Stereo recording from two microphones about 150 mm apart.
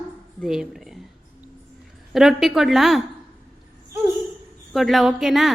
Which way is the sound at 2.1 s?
Centre (ahead or behind).